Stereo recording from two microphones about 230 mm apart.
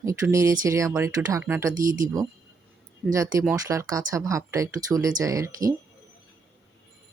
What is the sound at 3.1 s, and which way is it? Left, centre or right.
Speech, centre.